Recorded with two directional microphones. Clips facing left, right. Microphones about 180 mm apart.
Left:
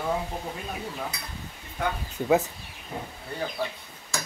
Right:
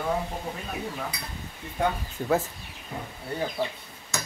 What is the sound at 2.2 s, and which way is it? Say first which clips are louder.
Speech: left 3 dB; 10° left (ahead or behind).